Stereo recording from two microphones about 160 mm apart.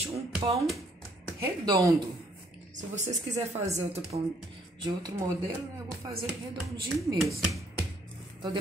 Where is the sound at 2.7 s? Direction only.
50° right (ahead or behind).